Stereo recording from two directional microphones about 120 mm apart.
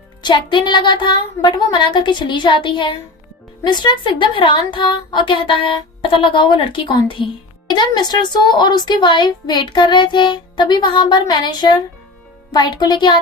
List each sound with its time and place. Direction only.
0.2 s a woman's voice: 40° left (ahead or behind)